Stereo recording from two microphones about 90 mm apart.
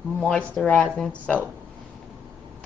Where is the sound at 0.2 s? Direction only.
10° left (ahead or behind).